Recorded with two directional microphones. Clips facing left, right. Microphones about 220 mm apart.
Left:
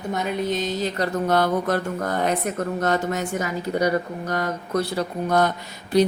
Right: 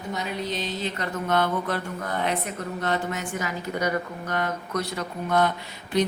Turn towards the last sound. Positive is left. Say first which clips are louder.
# left 5 dB
turn(degrees=40)  # may be behind; listen again after turning